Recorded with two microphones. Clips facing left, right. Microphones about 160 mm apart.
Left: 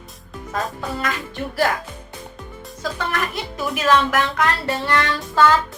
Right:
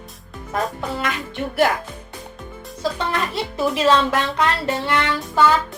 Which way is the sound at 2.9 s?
25° right (ahead or behind).